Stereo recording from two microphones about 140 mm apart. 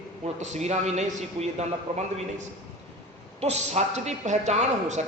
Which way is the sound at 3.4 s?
50° right (ahead or behind).